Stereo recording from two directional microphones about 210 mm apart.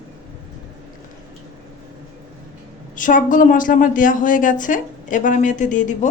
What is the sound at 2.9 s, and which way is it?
A woman's voice, 40° left (ahead or behind).